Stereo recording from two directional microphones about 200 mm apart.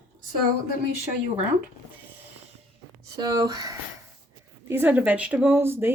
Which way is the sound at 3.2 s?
20° right (ahead or behind).